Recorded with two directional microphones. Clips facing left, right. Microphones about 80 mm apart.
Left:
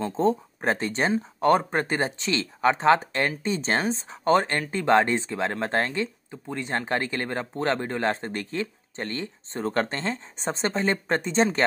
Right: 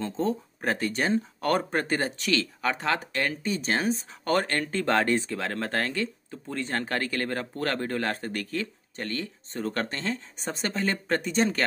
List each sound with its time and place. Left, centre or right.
0.1 s speech: left